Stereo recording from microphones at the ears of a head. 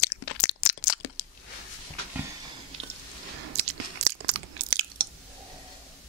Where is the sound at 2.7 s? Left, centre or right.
Right.